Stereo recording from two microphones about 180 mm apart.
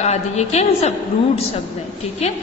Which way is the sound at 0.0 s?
35° left (ahead or behind).